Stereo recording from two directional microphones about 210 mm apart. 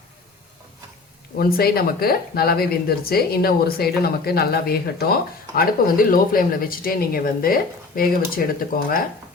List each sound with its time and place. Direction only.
1.4 s speech: 45° left (ahead or behind)